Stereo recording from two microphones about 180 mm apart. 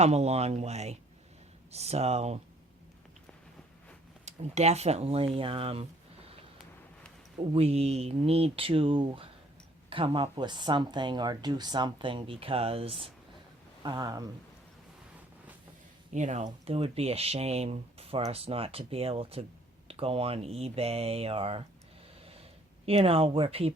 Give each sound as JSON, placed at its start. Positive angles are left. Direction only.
{"t": 0.0, "sound": "speech", "side_deg": -35}
{"t": 4.3, "sound": "speech", "side_deg": -40}
{"t": 7.3, "sound": "speech", "side_deg": -35}
{"t": 16.1, "sound": "speech", "side_deg": -40}
{"t": 22.2, "sound": "snort", "side_deg": -35}
{"t": 22.9, "sound": "speech", "side_deg": -30}